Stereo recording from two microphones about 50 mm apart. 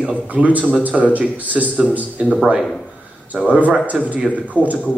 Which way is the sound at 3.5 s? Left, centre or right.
Right.